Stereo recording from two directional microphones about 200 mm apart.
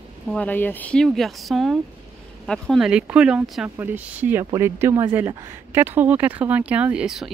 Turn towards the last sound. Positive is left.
turn(degrees=-5)  # may be behind; listen again after turning